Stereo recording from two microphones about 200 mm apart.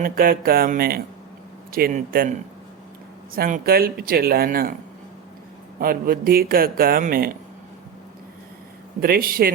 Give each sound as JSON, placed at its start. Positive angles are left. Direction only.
{"t": 0.0, "sound": "speech", "side_deg": -45}
{"t": 5.8, "sound": "speech", "side_deg": -45}
{"t": 9.0, "sound": "speech", "side_deg": -45}